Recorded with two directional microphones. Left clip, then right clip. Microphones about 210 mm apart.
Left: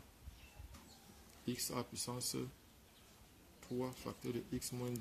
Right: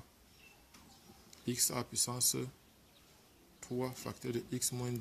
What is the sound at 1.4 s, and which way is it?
Speech, 30° right (ahead or behind).